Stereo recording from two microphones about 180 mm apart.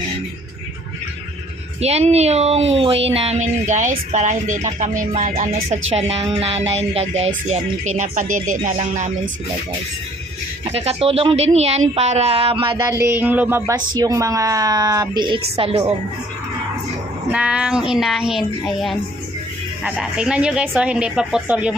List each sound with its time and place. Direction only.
1.8 s speech: 35° right (ahead or behind)
10.7 s speech: 35° right (ahead or behind)
12.8 s speech: 15° right (ahead or behind)
17.3 s speech: 5° right (ahead or behind)